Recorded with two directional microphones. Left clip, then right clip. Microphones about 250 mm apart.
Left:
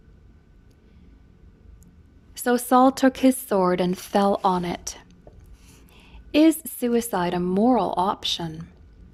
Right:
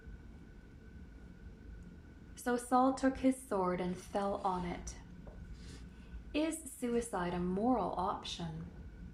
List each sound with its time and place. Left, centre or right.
2.3 s a woman's voice: left
6.3 s a woman's voice: left